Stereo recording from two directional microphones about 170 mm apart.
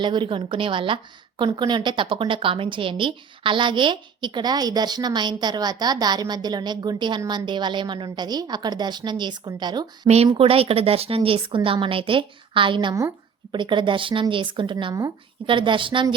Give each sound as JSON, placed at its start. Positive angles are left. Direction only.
{"t": 0.0, "sound": "a woman's voice", "side_deg": -25}